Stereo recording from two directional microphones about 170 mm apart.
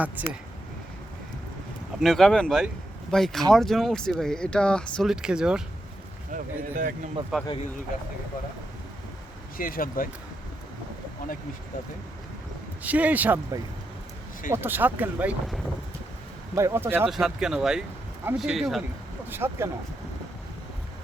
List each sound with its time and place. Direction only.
0.2 s speech: 10° right (ahead or behind)
2.0 s speech: centre (ahead or behind)
6.3 s speech: 50° right (ahead or behind)
7.3 s speech: 5° right (ahead or behind)
9.6 s speech: 55° left (ahead or behind)
12.8 s speech: 10° right (ahead or behind)
16.6 s speech: 15° right (ahead or behind)
17.1 s speech: 5° right (ahead or behind)
19.3 s speech: 15° right (ahead or behind)